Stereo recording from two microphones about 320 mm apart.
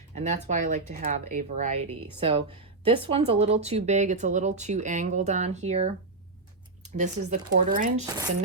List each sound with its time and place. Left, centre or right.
0.1 s speech: right
6.9 s speech: right